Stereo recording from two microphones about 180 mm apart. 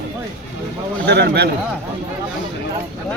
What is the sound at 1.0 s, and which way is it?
Speech, 65° right (ahead or behind).